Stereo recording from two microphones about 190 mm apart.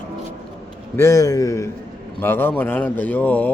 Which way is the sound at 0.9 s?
15° left (ahead or behind).